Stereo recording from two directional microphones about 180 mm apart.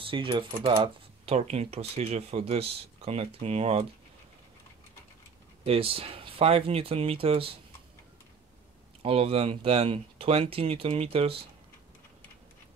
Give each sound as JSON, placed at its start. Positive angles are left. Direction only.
{"t": 0.0, "sound": "speech", "side_deg": -30}
{"t": 5.6, "sound": "speech", "side_deg": -30}
{"t": 9.0, "sound": "speech", "side_deg": -35}